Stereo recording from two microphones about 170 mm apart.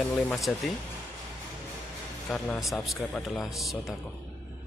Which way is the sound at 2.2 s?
5° left (ahead or behind).